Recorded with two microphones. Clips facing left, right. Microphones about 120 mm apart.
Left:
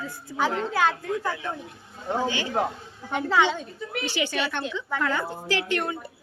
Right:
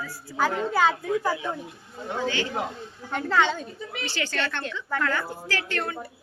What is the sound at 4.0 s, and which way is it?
A woman's voice, 15° left (ahead or behind).